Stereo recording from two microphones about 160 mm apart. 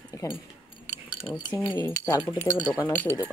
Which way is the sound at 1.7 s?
20° left (ahead or behind).